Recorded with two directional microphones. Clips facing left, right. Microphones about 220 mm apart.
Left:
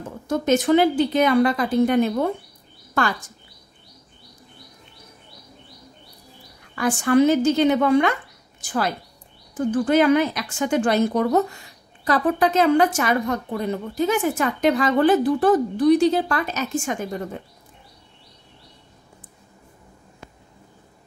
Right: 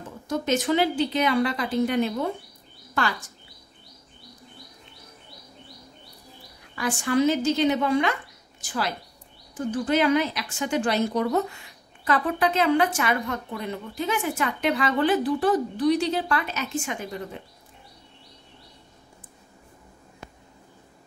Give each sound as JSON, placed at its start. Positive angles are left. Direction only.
{"t": 0.3, "sound": "a woman's voice", "side_deg": 50}
{"t": 6.7, "sound": "a woman's voice", "side_deg": 50}
{"t": 9.7, "sound": "a woman's voice", "side_deg": 50}
{"t": 12.0, "sound": "a woman's voice", "side_deg": 40}